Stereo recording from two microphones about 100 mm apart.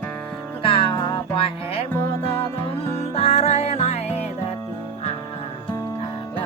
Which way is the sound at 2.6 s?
85° left.